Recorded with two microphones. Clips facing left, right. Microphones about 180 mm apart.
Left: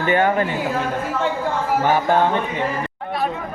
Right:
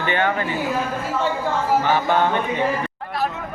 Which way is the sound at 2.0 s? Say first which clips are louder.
Left 2 dB; 35° left (ahead or behind).